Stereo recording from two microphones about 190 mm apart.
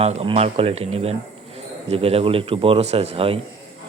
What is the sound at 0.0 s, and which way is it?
Speech, 35° right (ahead or behind).